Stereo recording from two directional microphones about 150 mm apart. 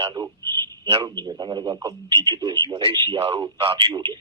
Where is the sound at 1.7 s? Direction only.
20° right (ahead or behind).